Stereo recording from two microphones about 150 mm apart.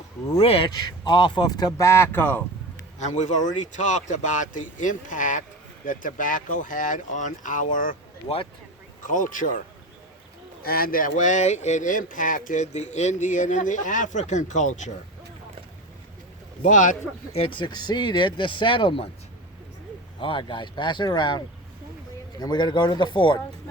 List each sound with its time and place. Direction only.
0.3 s speech: 40° left (ahead or behind); by 2.8 s 10° left (ahead or behind)
3.0 s speech: 50° left (ahead or behind)
9.0 s speech: 60° left (ahead or behind)
10.6 s speech: 85° left; by 14.9 s 55° left (ahead or behind)
16.6 s speech: 60° left (ahead or behind)
17.3 s speech: 35° left (ahead or behind)
20.1 s speech: 35° left (ahead or behind)